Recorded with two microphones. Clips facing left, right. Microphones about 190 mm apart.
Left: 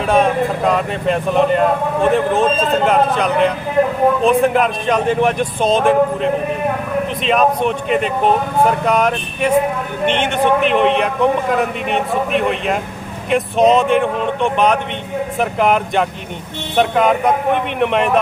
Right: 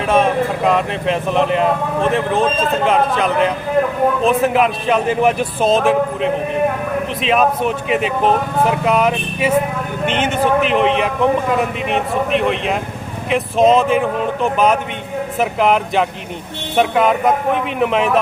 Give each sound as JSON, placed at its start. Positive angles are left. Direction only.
{"t": 0.0, "sound": "speech", "side_deg": 0}